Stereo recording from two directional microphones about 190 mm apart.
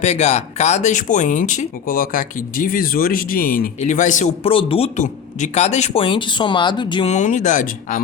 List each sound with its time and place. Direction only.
0.0 s speech: 35° left (ahead or behind)
7.1 s speech: 40° left (ahead or behind)